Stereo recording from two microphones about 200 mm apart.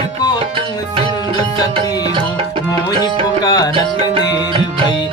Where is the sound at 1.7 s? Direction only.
30° right (ahead or behind).